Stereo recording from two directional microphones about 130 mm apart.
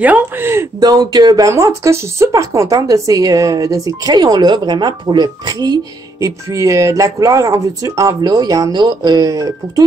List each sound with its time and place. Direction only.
0.0 s speech: 15° right (ahead or behind)